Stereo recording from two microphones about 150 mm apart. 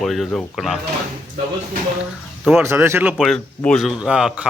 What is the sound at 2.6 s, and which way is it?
Speech, 15° right (ahead or behind).